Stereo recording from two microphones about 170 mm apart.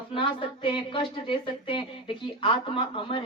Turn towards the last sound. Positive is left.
turn(degrees=30)  # may be behind; listen again after turning